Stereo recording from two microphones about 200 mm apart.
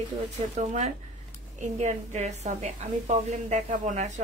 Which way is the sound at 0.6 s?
35° right (ahead or behind).